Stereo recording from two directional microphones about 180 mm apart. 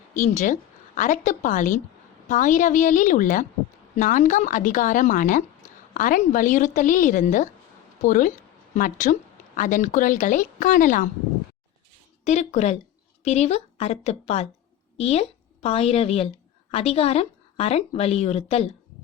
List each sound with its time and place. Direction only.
0.1 s a woman's voice: 45° left (ahead or behind)
12.2 s a woman's voice: 40° left (ahead or behind)